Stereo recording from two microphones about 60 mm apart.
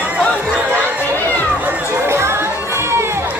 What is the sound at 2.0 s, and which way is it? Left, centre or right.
Music, right.